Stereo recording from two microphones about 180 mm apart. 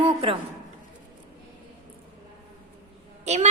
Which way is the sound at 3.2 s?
40° right (ahead or behind).